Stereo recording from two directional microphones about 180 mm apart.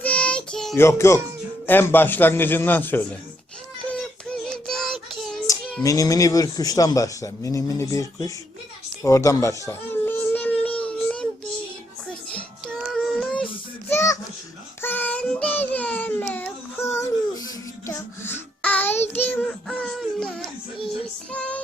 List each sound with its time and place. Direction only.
0.0 s child singing: 5° left (ahead or behind)
0.8 s a man's voice: 15° left (ahead or behind)
3.8 s child singing: 5° left (ahead or behind)
5.8 s speech: 20° left (ahead or behind)
9.0 s a sound: 15° left (ahead or behind)
12.3 s child singing: 5° left (ahead or behind)
19.2 s a sound: 10° left (ahead or behind)
21.3 s child singing: 5° left (ahead or behind)